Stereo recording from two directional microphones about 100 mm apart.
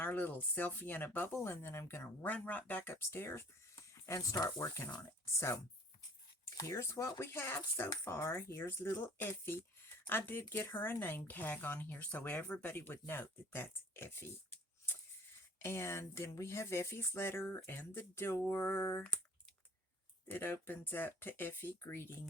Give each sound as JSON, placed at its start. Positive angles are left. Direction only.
{"t": 0.0, "sound": "speech", "side_deg": 20}
{"t": 6.6, "sound": "speech", "side_deg": 30}
{"t": 15.6, "sound": "speech", "side_deg": 25}
{"t": 20.2, "sound": "speech", "side_deg": 20}